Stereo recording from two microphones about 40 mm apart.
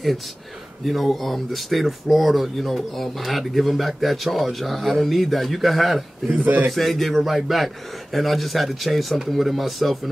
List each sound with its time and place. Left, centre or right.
1.1 s a man's voice: centre
6.4 s a man's voice: right
6.7 s a man's voice: centre